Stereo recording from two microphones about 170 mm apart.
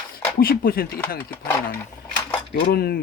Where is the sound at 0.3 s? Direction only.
60° left (ahead or behind).